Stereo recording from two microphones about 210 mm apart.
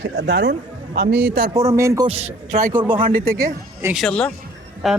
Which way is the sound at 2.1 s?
30° right (ahead or behind).